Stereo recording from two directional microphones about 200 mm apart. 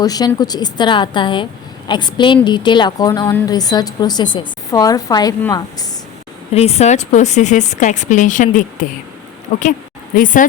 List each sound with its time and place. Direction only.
0.0 s a woman's voice: 20° left (ahead or behind)
6.5 s speech: 30° left (ahead or behind)